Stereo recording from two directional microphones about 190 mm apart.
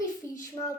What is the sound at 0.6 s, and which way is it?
Speech, 25° left (ahead or behind).